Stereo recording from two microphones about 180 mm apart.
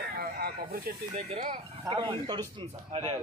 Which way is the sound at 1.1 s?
35° right (ahead or behind).